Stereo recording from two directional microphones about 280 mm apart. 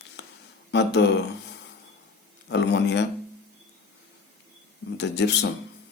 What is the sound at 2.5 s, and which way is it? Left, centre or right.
Speech, left.